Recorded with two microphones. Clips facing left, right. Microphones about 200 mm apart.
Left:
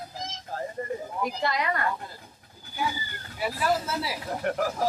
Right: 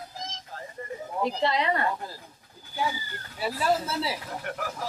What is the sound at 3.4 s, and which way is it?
Speech, 30° right (ahead or behind).